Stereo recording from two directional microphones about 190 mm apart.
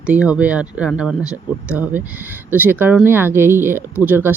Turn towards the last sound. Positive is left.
turn(degrees=-10)  # may be behind; listen again after turning